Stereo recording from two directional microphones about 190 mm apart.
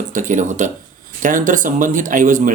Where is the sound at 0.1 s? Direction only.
40° right (ahead or behind).